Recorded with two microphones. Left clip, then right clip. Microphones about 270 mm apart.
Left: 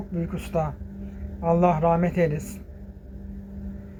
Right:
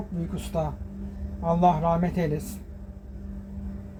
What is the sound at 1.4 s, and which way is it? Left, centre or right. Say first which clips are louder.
Speech: left 1 dB; centre.